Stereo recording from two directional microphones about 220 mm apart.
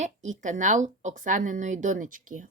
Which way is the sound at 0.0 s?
35° right (ahead or behind).